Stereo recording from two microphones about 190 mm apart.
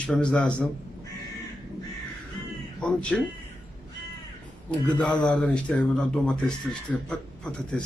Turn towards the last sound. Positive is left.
turn(degrees=5)  # may be behind; listen again after turning